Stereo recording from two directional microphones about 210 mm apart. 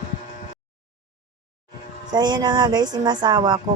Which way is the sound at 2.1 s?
20° right (ahead or behind).